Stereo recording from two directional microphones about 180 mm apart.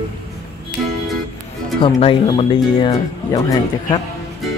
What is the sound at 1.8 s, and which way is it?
Speech, 30° left (ahead or behind).